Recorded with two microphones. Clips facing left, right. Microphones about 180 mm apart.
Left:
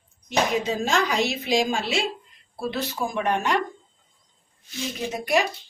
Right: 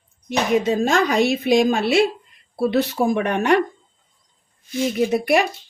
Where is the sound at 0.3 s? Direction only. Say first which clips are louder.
Right 5 dB; 55° right (ahead or behind).